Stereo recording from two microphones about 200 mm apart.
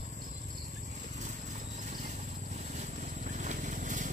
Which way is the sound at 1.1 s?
35° right (ahead or behind).